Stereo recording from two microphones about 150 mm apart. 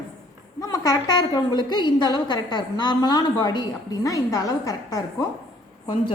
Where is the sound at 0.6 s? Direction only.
25° left (ahead or behind).